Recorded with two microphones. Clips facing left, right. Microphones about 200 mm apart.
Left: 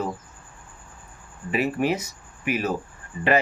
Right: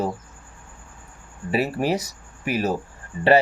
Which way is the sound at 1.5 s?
35° right (ahead or behind).